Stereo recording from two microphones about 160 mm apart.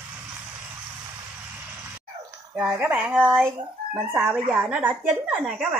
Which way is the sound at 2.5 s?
5° right (ahead or behind).